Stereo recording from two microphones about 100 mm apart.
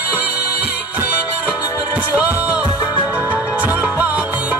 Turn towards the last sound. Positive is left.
turn(degrees=-15)  # may be behind; listen again after turning